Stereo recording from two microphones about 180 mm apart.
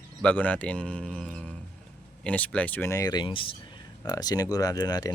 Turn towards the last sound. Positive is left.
turn(degrees=20)  # may be behind; listen again after turning